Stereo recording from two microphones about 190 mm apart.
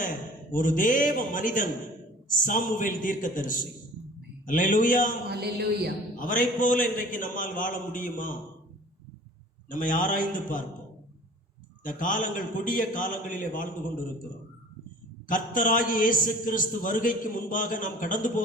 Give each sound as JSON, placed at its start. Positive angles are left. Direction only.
{"t": 0.5, "sound": "a man's voice", "side_deg": 45}
{"t": 5.3, "sound": "speech", "side_deg": -60}
{"t": 6.1, "sound": "a man's voice", "side_deg": 45}
{"t": 9.6, "sound": "a man's voice", "side_deg": 45}
{"t": 11.8, "sound": "a man's voice", "side_deg": 45}
{"t": 15.3, "sound": "a man's voice", "side_deg": 45}